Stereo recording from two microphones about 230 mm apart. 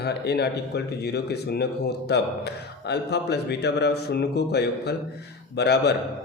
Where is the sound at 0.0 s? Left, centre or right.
Left.